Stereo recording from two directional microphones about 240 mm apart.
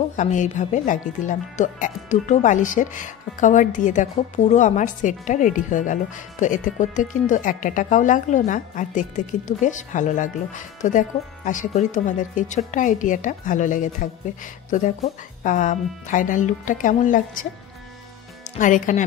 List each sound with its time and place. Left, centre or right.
0.1 s speech: left
18.6 s speech: left